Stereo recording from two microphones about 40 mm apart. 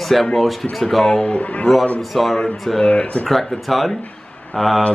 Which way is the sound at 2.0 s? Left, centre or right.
Centre.